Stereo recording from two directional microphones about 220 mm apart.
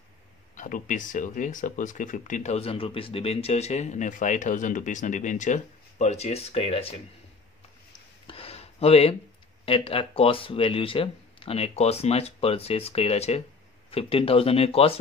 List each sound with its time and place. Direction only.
0.6 s speech: 35° left (ahead or behind)
8.3 s a sound: 25° left (ahead or behind)
9.7 s speech: 25° left (ahead or behind)